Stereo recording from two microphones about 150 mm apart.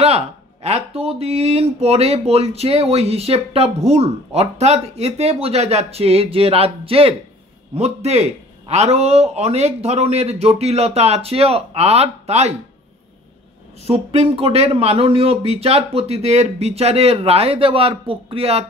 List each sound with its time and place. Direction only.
0.0 s speech: 45° right (ahead or behind)
13.7 s speech: 45° right (ahead or behind)